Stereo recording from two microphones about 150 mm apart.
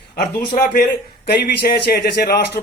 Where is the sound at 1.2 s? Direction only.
90° left.